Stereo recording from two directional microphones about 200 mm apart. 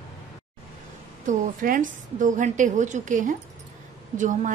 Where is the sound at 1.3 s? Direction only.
40° right (ahead or behind).